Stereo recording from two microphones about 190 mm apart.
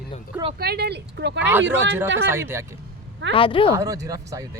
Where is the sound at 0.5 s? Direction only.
55° right (ahead or behind).